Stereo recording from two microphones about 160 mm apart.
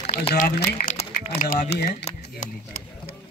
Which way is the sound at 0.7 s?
60° left (ahead or behind).